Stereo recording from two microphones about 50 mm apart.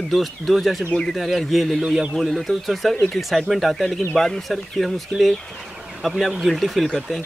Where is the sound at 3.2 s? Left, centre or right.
Centre.